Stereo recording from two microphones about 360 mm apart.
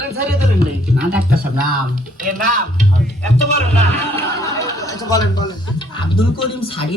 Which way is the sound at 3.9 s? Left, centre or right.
Centre.